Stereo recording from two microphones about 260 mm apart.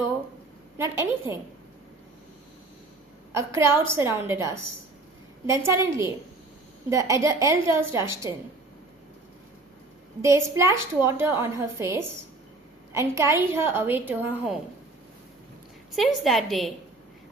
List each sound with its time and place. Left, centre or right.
0.8 s a woman's voice: centre
3.3 s a woman's voice: centre
10.2 s a woman's voice: centre
16.0 s a woman's voice: centre